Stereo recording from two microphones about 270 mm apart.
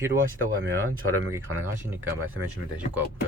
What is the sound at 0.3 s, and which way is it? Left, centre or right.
Speech, right.